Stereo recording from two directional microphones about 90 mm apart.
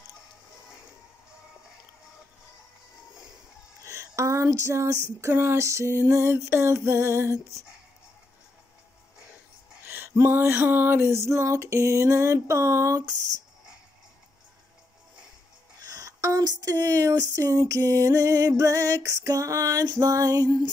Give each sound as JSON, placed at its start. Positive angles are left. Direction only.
{"t": 3.8, "sound": "speech", "side_deg": -35}
{"t": 9.8, "sound": "speech", "side_deg": -30}
{"t": 15.9, "sound": "speech", "side_deg": -40}